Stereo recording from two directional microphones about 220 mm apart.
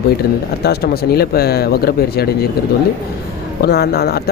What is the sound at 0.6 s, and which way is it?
Speech, 45° left (ahead or behind).